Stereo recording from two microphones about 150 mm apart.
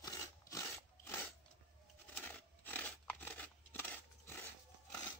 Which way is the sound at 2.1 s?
10° left (ahead or behind).